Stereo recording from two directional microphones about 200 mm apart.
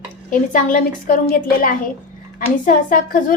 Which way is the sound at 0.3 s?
40° left (ahead or behind).